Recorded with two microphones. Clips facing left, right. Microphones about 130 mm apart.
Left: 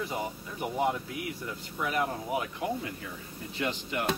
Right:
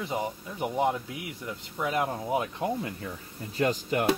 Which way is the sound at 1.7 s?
20° right (ahead or behind).